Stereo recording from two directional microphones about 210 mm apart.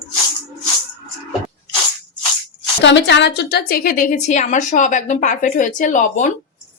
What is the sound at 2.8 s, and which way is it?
A woman's voice, 55° left (ahead or behind).